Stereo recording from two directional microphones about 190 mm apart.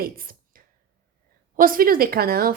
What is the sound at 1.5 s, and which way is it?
A woman's voice, 50° right (ahead or behind).